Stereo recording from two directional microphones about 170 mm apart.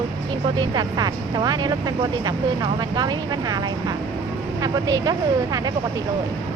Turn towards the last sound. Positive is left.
turn(degrees=-20)  # may be behind; listen again after turning